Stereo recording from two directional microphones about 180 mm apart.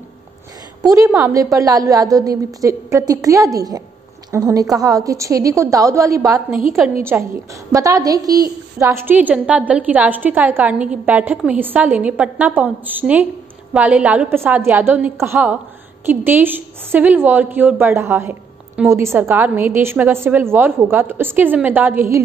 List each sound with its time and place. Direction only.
0.8 s a woman's voice: 20° right (ahead or behind)